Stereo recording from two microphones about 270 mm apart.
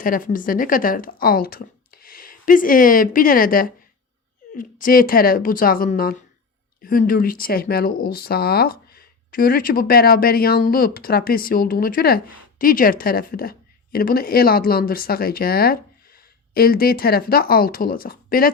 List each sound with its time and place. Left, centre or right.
0.0 s speech: left